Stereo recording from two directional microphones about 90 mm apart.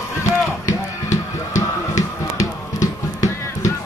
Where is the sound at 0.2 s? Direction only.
35° left (ahead or behind).